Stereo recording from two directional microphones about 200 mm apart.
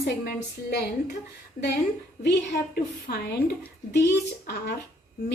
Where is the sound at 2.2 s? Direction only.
55° left (ahead or behind).